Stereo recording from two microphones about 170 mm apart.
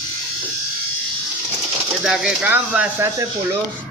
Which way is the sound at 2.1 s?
5° right (ahead or behind).